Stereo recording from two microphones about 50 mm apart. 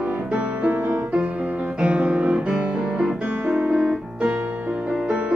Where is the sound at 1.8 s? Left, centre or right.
Right.